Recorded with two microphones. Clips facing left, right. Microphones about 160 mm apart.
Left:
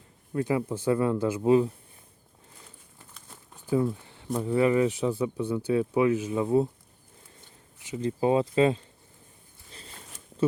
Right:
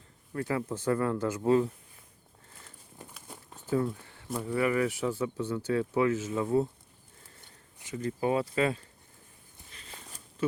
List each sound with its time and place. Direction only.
0.3 s speech: 15° left (ahead or behind)
3.0 s a sound: 15° right (ahead or behind)
3.7 s speech: 15° left (ahead or behind)
7.8 s speech: 20° left (ahead or behind)